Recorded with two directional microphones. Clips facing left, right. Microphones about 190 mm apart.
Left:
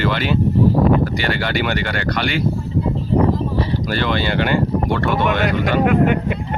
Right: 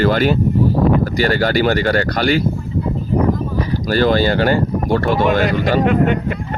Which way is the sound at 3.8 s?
40° right (ahead or behind).